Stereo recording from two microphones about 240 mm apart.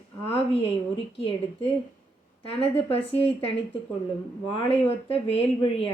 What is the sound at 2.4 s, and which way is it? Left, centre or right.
A woman's voice, left.